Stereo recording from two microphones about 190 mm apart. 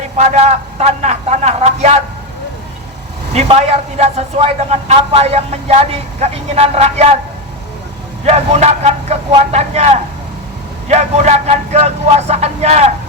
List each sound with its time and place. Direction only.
0.2 s a man's voice: 35° right (ahead or behind)
3.3 s a man's voice: 35° right (ahead or behind)
8.2 s a man's voice: 35° right (ahead or behind)